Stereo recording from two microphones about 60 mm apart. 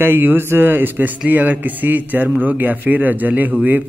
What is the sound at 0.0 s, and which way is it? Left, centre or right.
Speech, right.